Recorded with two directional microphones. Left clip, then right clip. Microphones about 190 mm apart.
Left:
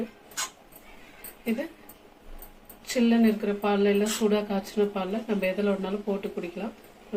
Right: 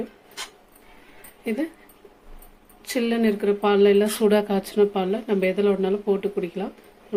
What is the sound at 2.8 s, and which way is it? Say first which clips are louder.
Speech: right 1 dB; 55° right (ahead or behind).